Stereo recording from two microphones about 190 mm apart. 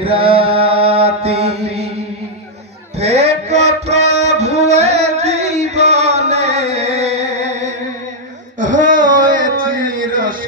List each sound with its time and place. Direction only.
0.0 s mantra: 30° right (ahead or behind)
3.0 s music: 35° right (ahead or behind)
8.5 s a sound: 40° right (ahead or behind)